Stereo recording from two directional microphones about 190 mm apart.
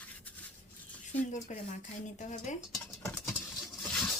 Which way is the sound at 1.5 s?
40° left (ahead or behind).